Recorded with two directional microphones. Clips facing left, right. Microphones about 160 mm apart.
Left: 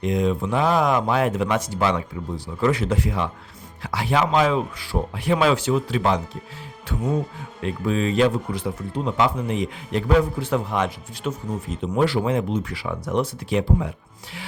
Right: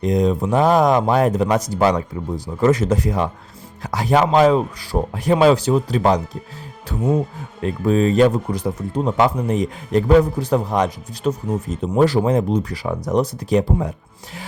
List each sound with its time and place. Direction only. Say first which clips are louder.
0.0 s speech: right 4 dB; 40° right (ahead or behind)
7.6 s speech: right 6 dB; 40° right (ahead or behind)